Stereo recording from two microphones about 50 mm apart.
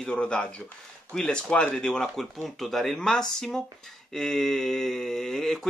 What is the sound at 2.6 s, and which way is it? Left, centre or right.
Speech, centre.